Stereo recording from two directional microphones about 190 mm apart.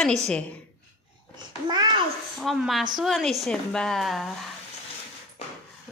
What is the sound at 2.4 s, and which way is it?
A woman's voice, centre (ahead or behind).